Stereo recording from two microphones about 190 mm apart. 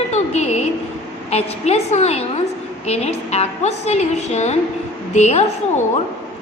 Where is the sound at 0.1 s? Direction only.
35° left (ahead or behind).